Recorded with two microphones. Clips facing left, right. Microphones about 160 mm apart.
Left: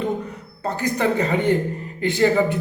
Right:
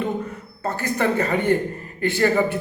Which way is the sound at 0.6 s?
15° left (ahead or behind).